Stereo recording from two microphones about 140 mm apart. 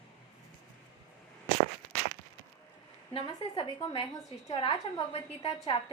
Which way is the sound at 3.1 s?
40° left (ahead or behind).